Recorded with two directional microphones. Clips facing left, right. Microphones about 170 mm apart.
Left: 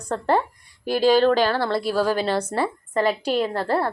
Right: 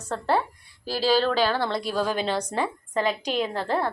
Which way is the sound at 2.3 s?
10° left (ahead or behind).